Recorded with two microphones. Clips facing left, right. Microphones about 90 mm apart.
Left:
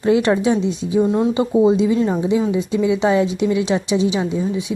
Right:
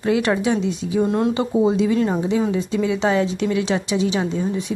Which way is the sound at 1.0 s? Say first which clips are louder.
Left 2 dB; centre (ahead or behind).